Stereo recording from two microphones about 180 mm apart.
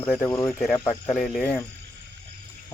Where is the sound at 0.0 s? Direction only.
10° left (ahead or behind).